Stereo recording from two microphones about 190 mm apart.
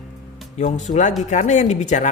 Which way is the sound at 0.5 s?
40° left (ahead or behind).